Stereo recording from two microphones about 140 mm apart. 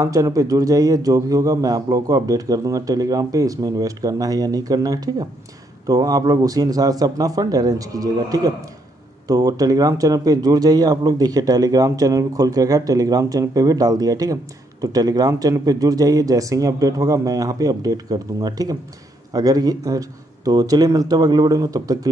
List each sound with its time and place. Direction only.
0.0 s speech: 25° right (ahead or behind)